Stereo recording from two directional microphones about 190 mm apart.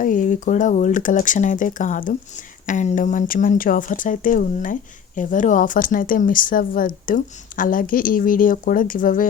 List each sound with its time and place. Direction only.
0.0 s speech: 45° left (ahead or behind)